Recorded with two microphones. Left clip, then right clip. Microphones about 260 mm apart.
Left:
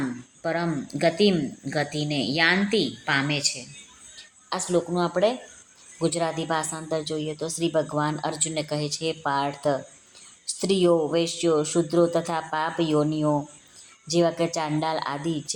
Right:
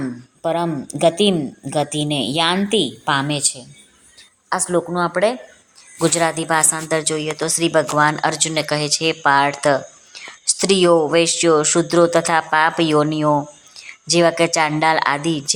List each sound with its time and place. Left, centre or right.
0.4 s a woman's voice: centre
2.1 s speech: centre
2.5 s a woman's voice: right
10.2 s whispering: centre
11.0 s a woman's voice: centre